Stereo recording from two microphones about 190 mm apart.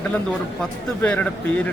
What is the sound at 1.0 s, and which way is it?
Speech, 5° left (ahead or behind).